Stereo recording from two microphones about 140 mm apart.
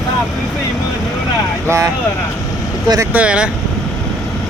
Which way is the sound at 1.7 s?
20° right (ahead or behind).